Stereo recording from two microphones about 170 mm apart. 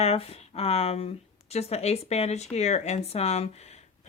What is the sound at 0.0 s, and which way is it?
Speech, 35° left (ahead or behind).